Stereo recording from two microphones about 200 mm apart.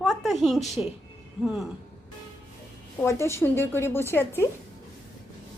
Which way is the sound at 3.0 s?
15° left (ahead or behind).